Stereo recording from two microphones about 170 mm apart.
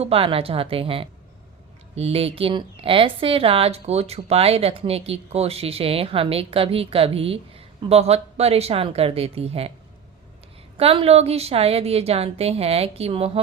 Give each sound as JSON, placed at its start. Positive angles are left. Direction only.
{"t": 0.0, "sound": "a woman's voice", "side_deg": -35}
{"t": 10.8, "sound": "a woman's voice", "side_deg": -35}